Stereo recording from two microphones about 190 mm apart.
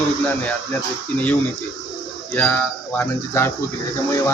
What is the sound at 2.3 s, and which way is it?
Speech, 10° left (ahead or behind).